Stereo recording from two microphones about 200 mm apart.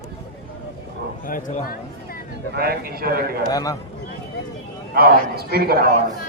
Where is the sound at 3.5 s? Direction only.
20° left (ahead or behind).